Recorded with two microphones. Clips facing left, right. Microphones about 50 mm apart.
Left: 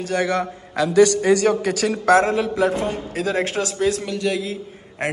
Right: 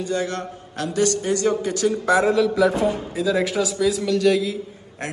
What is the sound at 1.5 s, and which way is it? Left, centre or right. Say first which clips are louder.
Speech: left 1 dB; left.